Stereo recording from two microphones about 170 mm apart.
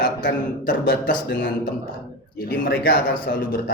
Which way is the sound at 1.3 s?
90° left.